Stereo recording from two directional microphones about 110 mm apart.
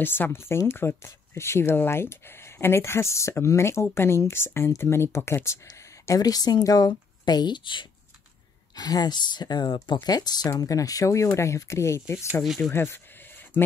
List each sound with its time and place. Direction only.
0.0 s speech: 20° left (ahead or behind); by 7.9 s 45° left (ahead or behind)
8.7 s speech: 35° left (ahead or behind)
12.7 s a sound: 20° left (ahead or behind)